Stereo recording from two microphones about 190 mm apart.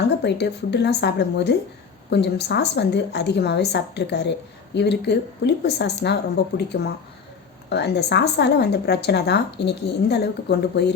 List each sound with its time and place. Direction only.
0.2 s a woman's voice: 65° left (ahead or behind)